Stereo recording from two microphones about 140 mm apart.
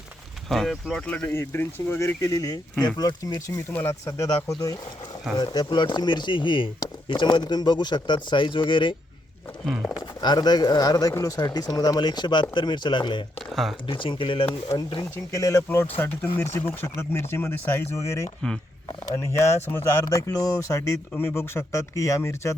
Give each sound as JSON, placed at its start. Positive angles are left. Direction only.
{"t": 0.4, "sound": "speech", "side_deg": 0}
{"t": 1.1, "sound": "speech", "side_deg": 15}
{"t": 3.7, "sound": "speech", "side_deg": 15}
{"t": 9.6, "sound": "speech", "side_deg": 0}
{"t": 10.2, "sound": "speech", "side_deg": 30}
{"t": 15.1, "sound": "speech", "side_deg": 20}